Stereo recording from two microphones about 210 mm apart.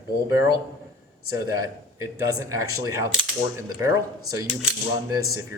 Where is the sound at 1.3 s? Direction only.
15° right (ahead or behind).